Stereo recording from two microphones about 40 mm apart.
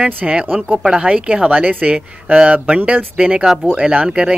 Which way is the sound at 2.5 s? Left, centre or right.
Right.